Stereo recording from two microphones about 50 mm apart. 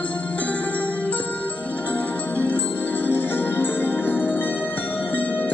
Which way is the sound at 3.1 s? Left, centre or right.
Left.